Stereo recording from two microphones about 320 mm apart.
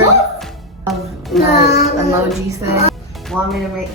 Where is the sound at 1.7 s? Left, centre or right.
Centre.